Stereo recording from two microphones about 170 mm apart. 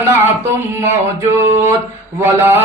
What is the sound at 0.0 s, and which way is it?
Mantra, 15° right (ahead or behind).